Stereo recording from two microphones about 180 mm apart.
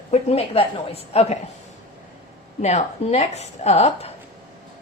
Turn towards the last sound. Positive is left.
turn(degrees=35)  # may be behind; listen again after turning